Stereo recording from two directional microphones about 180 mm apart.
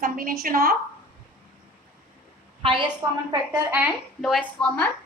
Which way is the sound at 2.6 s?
30° right (ahead or behind).